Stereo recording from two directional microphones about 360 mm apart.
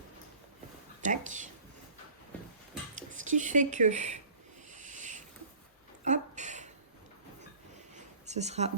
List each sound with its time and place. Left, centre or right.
1.0 s speech: right
2.9 s speech: right
4.7 s a sound: right
8.3 s speech: centre